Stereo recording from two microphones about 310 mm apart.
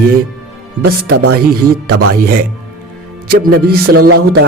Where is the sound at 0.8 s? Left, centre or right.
Right.